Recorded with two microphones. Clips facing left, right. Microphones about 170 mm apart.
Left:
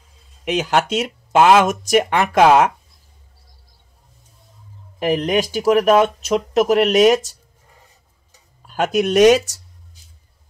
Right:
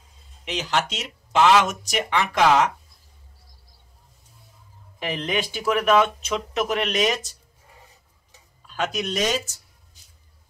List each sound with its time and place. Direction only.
0.5 s speech: 55° left (ahead or behind)
4.9 s speech: 45° left (ahead or behind)
8.6 s speech: 50° left (ahead or behind); by 9.6 s 65° left (ahead or behind)